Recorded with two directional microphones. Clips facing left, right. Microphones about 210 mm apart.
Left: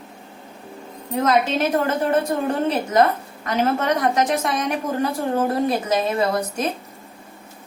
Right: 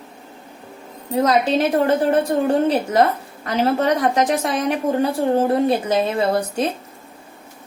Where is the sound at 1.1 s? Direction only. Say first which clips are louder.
Right 2 dB; 35° right (ahead or behind).